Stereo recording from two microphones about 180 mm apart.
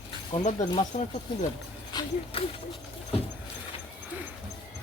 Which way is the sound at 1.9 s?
25° left (ahead or behind).